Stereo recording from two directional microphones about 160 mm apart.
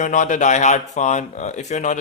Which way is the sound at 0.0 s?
50° left (ahead or behind).